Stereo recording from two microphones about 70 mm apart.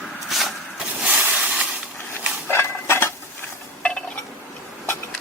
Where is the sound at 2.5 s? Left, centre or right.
Left.